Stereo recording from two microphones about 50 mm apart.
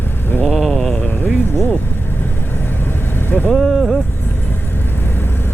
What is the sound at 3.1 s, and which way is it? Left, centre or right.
Vehicle, left.